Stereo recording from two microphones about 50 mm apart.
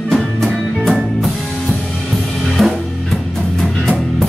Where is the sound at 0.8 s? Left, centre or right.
Centre.